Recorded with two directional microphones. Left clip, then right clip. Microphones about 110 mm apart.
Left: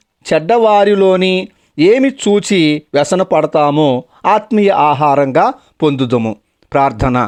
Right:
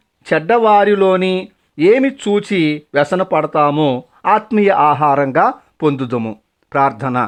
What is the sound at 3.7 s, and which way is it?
Speech, 10° left (ahead or behind).